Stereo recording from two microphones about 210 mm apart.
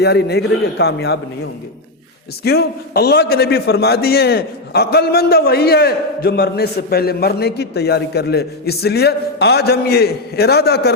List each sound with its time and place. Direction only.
0.0 s a man's voice: 50° left (ahead or behind)
2.4 s a man's voice: 50° left (ahead or behind)